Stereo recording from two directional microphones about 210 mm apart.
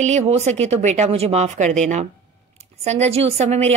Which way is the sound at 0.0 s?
30° right (ahead or behind).